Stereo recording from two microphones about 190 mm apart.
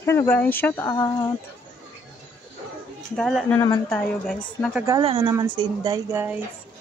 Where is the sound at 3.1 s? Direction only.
Centre (ahead or behind).